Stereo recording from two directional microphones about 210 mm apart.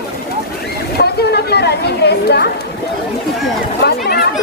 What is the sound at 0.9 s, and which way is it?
Chatter, 50° left (ahead or behind).